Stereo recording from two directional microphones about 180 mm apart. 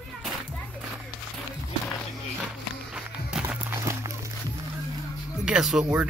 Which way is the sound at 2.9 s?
5° right (ahead or behind).